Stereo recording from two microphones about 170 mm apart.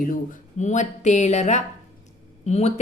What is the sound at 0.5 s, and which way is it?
A woman's voice, 45° left (ahead or behind).